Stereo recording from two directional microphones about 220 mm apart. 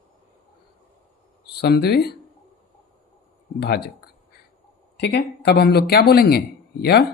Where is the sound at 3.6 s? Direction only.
45° left (ahead or behind).